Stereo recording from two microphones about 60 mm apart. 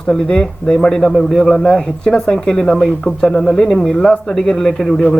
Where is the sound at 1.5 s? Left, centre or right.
Centre.